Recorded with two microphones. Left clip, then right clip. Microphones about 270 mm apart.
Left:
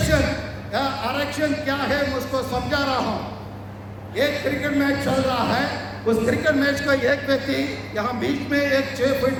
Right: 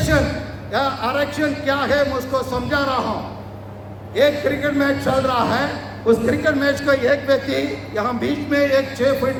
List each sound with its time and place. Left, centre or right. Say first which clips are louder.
0.7 s a man's voice: right 4 dB; centre
4.1 s a man's voice: right 5 dB; centre